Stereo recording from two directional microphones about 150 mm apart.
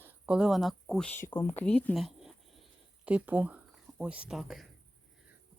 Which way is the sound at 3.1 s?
10° right (ahead or behind).